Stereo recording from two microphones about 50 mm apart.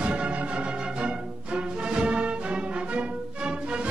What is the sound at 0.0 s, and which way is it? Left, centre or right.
Music, right.